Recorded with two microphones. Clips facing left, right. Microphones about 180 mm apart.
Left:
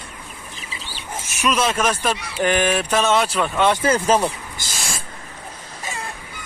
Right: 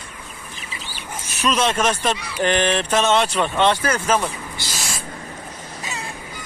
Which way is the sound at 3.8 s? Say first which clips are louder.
Left 3 dB; 30° left (ahead or behind).